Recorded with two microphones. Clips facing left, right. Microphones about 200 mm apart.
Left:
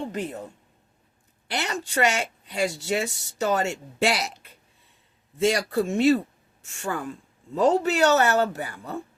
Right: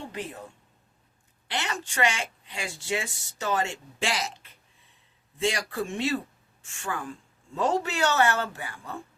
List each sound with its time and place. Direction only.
1.5 s a woman's voice: 40° left (ahead or behind)